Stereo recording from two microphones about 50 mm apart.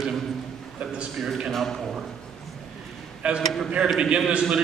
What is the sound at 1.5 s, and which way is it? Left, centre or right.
Speech, centre.